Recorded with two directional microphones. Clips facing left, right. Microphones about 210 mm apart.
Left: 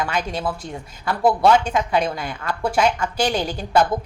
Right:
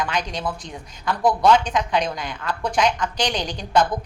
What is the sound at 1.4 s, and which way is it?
A woman's voice, 5° left (ahead or behind).